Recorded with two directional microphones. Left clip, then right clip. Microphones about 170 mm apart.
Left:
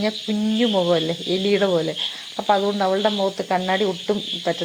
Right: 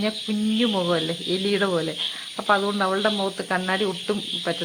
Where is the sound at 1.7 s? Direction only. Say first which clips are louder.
Left 3 dB; 10° left (ahead or behind).